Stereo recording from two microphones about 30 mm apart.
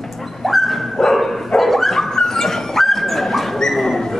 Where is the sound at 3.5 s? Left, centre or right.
Centre.